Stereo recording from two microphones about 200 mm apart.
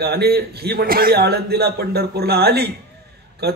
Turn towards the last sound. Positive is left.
turn(degrees=-55)  # may be behind; listen again after turning